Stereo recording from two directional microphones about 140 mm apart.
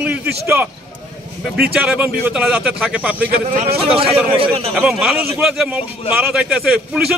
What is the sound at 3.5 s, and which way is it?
Speech, 70° right (ahead or behind).